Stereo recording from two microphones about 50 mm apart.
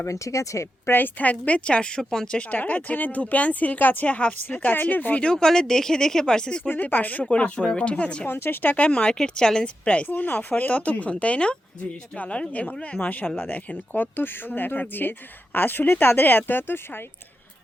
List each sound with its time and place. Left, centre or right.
0.1 s speech: left
0.9 s speech: left; by 2.4 s centre
2.5 s speech: left
4.4 s speech: left
5.2 s speech: centre
6.7 s speech: left
8.3 s speech: left
8.9 s speech: centre
9.8 s speech: left
13.0 s speech: left